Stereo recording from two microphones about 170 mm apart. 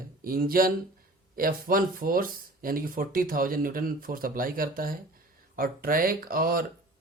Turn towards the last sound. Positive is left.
turn(degrees=-60)  # may be behind; listen again after turning